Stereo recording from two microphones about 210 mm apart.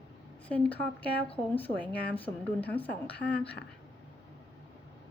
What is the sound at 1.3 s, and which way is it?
Speech, 25° left (ahead or behind).